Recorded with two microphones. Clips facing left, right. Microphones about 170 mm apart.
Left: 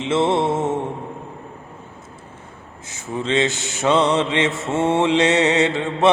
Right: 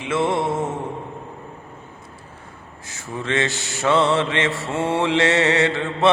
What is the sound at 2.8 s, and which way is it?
Mantra, 20° left (ahead or behind).